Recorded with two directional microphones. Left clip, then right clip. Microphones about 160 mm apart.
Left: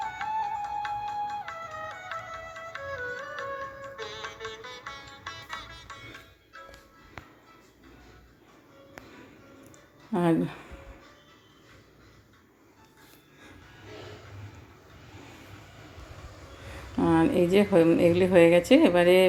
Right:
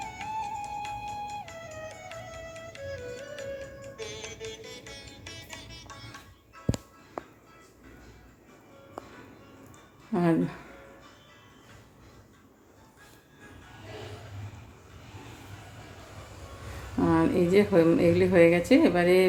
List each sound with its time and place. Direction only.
0.0 s music: 5° right (ahead or behind)
10.1 s a woman's voice: 15° left (ahead or behind)
17.0 s a woman's voice: 15° left (ahead or behind)